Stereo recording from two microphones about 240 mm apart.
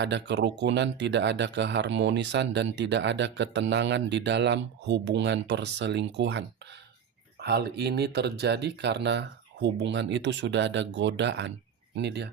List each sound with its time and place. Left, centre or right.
0.0 s speech: right